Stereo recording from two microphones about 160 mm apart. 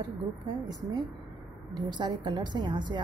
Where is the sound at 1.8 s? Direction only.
25° right (ahead or behind).